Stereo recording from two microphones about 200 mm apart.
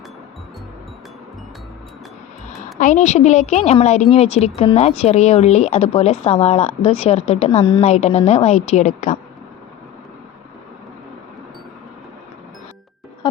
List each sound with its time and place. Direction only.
2.7 s speech: 40° left (ahead or behind)